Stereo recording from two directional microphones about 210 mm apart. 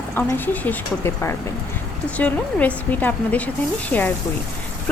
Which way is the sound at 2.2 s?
5° left (ahead or behind).